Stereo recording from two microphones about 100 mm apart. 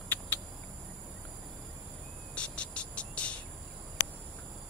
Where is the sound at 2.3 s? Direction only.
10° left (ahead or behind).